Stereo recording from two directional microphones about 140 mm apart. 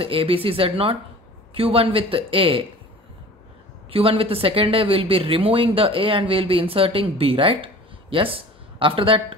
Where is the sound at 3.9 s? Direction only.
40° right (ahead or behind).